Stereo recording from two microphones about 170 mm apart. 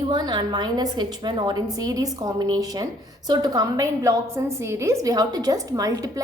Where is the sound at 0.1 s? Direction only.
25° right (ahead or behind).